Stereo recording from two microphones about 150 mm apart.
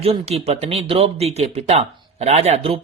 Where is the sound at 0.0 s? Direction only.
40° right (ahead or behind).